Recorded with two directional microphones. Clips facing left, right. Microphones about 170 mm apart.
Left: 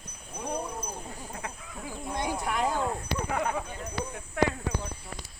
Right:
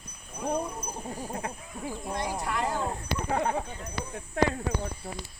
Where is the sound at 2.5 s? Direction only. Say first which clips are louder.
Left 2 dB; 15° left (ahead or behind).